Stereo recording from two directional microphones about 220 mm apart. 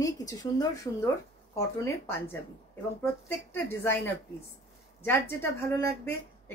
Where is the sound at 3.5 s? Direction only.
10° left (ahead or behind).